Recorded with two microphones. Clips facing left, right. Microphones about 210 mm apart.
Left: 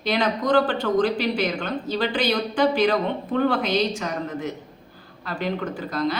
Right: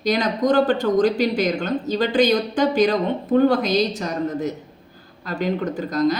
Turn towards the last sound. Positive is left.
turn(degrees=-40)  # may be behind; listen again after turning